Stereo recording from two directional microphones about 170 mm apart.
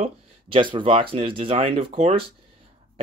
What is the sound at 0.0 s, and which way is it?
Speech, 30° right (ahead or behind).